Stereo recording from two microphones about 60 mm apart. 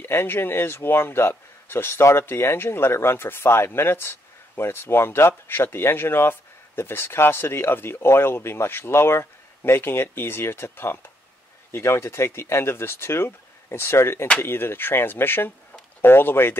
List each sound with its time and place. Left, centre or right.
0.0 s speech: left